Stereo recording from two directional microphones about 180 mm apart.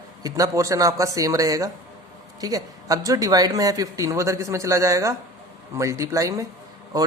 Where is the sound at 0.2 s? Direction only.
20° right (ahead or behind).